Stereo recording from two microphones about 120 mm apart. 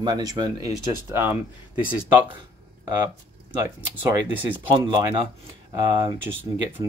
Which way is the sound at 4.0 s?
15° right (ahead or behind).